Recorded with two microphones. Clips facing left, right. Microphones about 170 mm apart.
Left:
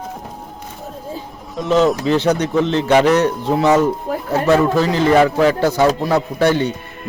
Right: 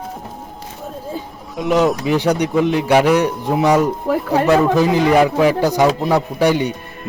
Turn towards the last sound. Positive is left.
turn(degrees=-15)  # may be behind; listen again after turning